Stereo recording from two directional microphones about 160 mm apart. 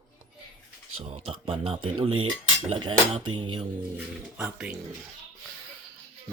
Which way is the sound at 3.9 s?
5° right (ahead or behind).